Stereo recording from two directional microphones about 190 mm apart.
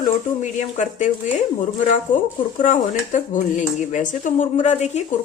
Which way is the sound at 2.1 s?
40° left (ahead or behind).